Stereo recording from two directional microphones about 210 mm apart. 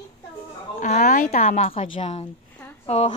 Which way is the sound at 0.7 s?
35° left (ahead or behind).